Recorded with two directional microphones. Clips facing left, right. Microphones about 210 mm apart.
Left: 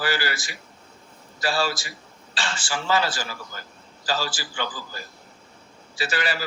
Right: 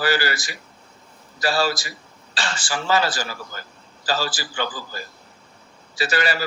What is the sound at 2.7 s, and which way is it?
Speech, 40° right (ahead or behind).